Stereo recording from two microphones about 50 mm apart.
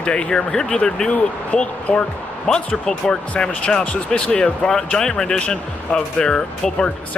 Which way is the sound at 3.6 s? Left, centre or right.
Left.